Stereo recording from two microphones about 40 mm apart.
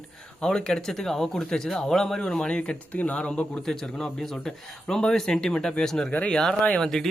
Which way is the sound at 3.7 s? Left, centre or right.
Centre.